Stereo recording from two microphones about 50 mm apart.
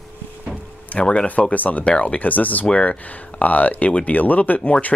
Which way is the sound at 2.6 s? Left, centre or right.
Left.